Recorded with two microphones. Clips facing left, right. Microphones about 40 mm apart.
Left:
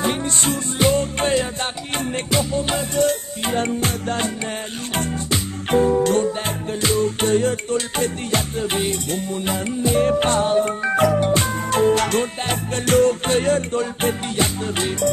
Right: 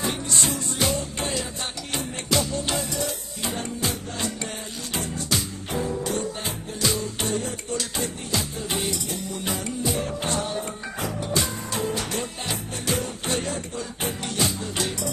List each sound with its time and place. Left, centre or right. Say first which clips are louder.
0.0 s music: left 5 dB; left
2.3 s music: left 3 dB; left
3.0 s music: left 10 dB; left
5.7 s music: left 12 dB; left
11.0 s music: left 14 dB; left
11.2 s music: left 7 dB; left
14.3 s music: left 5 dB; left